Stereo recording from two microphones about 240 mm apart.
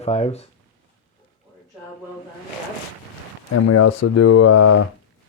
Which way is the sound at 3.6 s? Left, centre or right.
Left.